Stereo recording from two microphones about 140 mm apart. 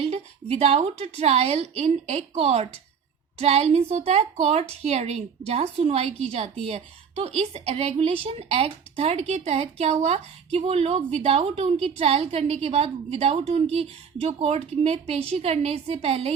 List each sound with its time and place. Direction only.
0.0 s a woman's voice: 50° right (ahead or behind)